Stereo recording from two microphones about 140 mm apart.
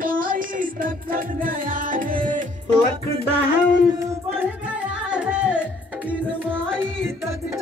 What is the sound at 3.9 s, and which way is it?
Music, 15° right (ahead or behind).